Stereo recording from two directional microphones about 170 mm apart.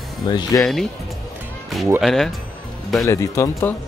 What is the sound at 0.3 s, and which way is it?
Speech, 25° left (ahead or behind).